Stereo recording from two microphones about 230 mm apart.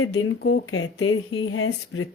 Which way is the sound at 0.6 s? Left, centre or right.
Left.